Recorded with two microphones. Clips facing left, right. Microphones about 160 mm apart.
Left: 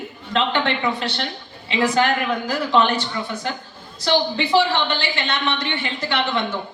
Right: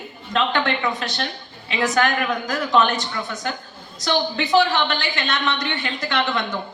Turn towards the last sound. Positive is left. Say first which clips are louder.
# even
turn(degrees=25)  # may be behind; listen again after turning